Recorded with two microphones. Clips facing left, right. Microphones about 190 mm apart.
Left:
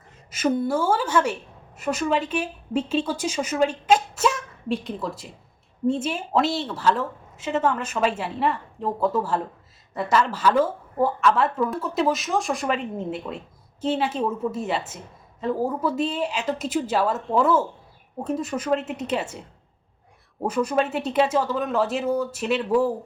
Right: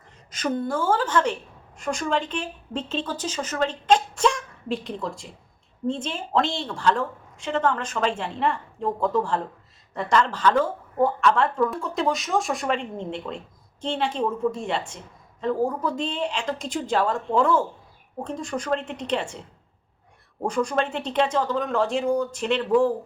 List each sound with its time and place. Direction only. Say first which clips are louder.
0.3 s a woman's voice: left 3 dB; 10° left (ahead or behind)
20.4 s a woman's voice: left 1 dB; 5° left (ahead or behind)